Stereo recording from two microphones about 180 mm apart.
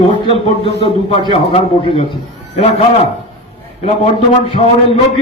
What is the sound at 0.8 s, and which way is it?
Mantra, 30° left (ahead or behind).